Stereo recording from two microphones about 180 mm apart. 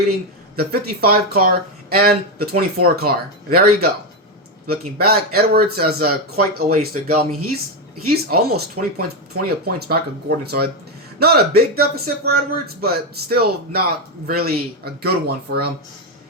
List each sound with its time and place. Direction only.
0.5 s speech: 60° right (ahead or behind)
8.1 s speech: 60° right (ahead or behind)